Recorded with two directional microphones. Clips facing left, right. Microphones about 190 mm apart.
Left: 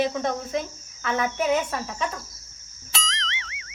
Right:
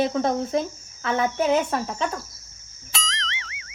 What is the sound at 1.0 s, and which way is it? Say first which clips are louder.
Cricket: right 2 dB; 30° right (ahead or behind).